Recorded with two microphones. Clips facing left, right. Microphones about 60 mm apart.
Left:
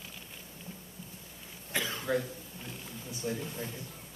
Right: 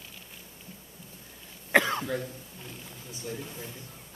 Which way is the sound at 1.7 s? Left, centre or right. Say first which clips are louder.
Right 11 dB; right.